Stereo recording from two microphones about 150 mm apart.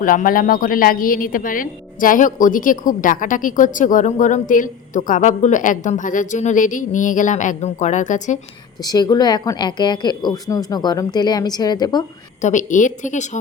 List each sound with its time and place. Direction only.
0.0 s a woman's voice: 65° left (ahead or behind)
8.8 s speech: 25° left (ahead or behind)
12.4 s a woman's voice: 55° left (ahead or behind)